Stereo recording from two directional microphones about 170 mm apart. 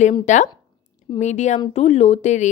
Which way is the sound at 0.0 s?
45° left (ahead or behind).